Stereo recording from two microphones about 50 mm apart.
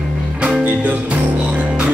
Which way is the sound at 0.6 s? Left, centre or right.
Right.